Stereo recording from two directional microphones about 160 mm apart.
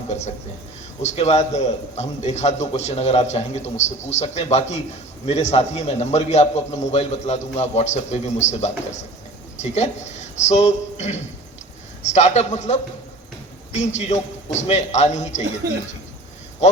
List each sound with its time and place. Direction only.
1.0 s a man's voice: 45° left (ahead or behind)